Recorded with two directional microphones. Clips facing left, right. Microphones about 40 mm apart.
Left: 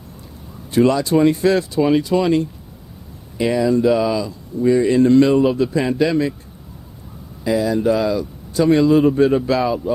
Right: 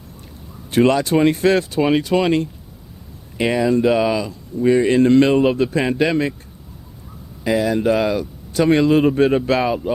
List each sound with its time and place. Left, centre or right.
0.7 s speech: right
7.4 s speech: right